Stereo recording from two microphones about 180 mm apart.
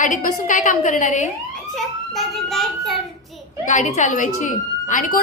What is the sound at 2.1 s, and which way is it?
Child singing, centre (ahead or behind).